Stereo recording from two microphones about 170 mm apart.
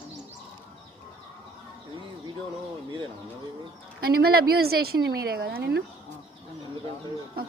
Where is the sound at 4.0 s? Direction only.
65° right (ahead or behind).